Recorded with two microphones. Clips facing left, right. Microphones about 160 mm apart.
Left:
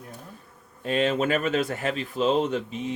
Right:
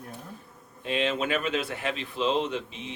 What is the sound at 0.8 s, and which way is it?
Speech, 40° left (ahead or behind).